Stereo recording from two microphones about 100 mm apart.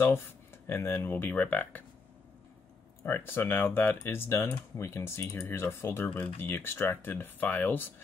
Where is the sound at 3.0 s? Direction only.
25° left (ahead or behind).